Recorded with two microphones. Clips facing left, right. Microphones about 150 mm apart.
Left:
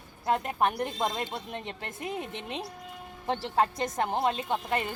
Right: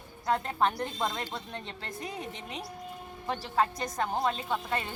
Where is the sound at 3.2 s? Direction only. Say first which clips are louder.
Left 2 dB; 25° left (ahead or behind).